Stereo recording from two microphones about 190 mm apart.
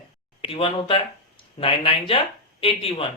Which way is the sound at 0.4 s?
30° left (ahead or behind).